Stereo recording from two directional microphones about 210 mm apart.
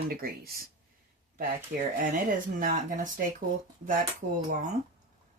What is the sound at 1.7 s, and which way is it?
Speech, 45° right (ahead or behind).